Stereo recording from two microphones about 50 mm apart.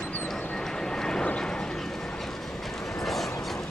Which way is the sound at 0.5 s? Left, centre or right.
Centre.